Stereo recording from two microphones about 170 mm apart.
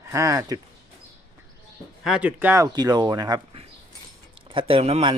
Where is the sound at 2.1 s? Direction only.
5° right (ahead or behind).